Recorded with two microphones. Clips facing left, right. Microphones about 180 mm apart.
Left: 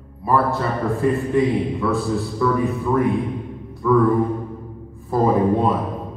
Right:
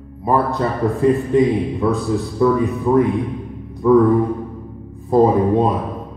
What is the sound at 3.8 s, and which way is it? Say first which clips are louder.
Speech: right 5 dB; 25° right (ahead or behind).